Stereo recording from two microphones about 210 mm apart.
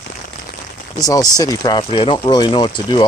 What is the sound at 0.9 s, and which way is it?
Speech, 15° left (ahead or behind).